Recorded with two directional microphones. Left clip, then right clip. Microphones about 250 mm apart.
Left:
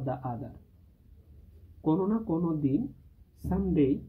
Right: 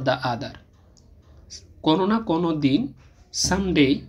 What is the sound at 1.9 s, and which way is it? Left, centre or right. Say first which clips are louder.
Speech: right 8 dB; centre.